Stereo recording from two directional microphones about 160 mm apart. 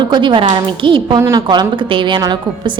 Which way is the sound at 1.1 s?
20° right (ahead or behind).